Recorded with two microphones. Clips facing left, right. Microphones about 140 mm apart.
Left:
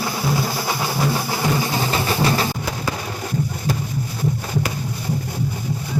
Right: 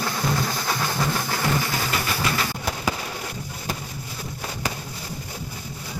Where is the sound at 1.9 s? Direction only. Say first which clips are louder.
Left 7 dB; 35° left (ahead or behind).